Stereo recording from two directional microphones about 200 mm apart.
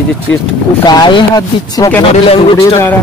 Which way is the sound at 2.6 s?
15° left (ahead or behind).